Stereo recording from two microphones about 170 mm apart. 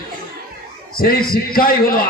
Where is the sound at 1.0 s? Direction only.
60° left (ahead or behind).